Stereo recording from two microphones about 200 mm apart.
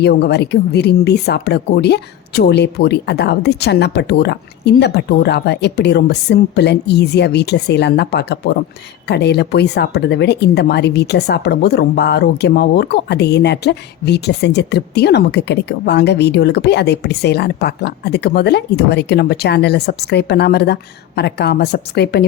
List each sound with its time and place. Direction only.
0.0 s speech: 55° left (ahead or behind)